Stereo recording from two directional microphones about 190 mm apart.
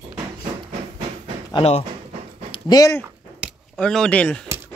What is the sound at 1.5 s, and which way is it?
Speech, 30° left (ahead or behind).